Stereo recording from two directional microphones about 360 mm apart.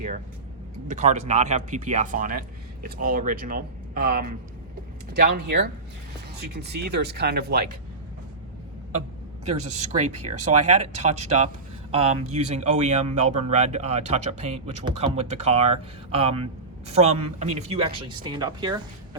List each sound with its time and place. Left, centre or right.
0.9 s speech: centre
9.5 s speech: centre